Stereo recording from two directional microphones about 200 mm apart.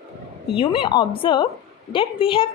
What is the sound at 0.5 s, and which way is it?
A woman's voice, 25° left (ahead or behind).